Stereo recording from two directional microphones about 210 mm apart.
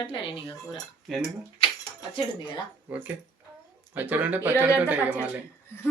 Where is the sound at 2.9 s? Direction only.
10° right (ahead or behind).